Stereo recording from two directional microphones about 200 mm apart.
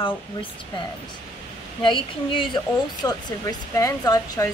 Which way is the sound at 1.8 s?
25° left (ahead or behind).